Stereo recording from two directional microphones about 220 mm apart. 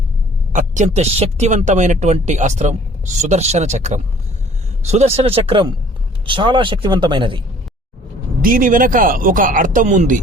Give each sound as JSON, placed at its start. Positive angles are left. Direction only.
{"t": 0.5, "sound": "a man's voice", "side_deg": -35}
{"t": 8.4, "sound": "speech", "side_deg": -40}